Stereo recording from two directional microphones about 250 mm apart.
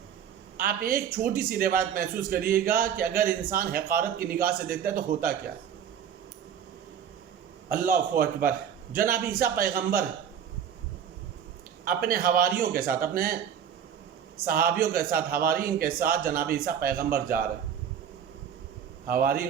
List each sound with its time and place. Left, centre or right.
0.5 s a man's voice: right
7.7 s a man's voice: right
11.9 s a man's voice: right
14.4 s a man's voice: right
19.0 s a man's voice: right